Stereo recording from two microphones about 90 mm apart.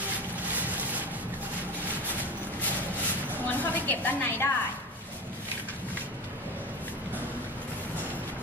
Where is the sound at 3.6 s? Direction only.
20° left (ahead or behind).